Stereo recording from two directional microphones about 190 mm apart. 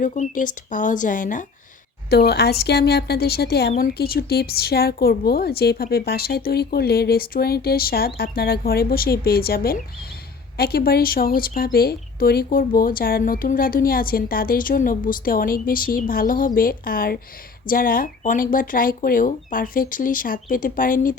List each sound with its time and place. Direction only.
0.0 s a woman's voice: 40° left (ahead or behind)
2.0 s a woman's voice: 60° left (ahead or behind)